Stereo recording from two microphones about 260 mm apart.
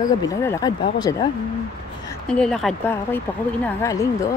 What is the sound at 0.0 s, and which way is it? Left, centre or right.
Speech, centre.